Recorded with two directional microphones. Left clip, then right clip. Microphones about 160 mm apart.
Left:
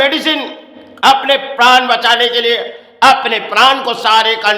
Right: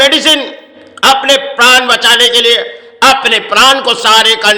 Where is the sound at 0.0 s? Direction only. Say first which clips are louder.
Right 6 dB; 15° right (ahead or behind).